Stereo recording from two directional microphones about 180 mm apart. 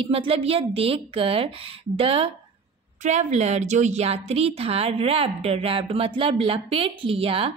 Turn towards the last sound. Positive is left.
turn(degrees=-30)  # may be behind; listen again after turning